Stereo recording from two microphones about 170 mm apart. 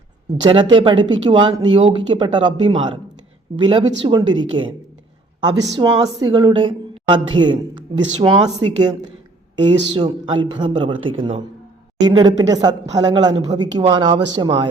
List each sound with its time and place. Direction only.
0.5 s speech: 30° right (ahead or behind)